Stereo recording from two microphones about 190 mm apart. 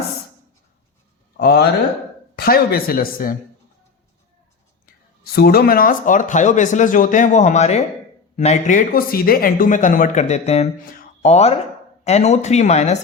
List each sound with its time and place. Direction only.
1.4 s speech: 55° left (ahead or behind)
5.2 s speech: 55° left (ahead or behind); by 13.0 s 35° left (ahead or behind)